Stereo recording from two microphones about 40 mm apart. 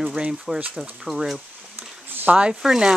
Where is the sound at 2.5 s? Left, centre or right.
Centre.